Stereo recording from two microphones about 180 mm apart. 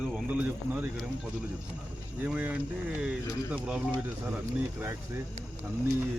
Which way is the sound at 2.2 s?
10° right (ahead or behind).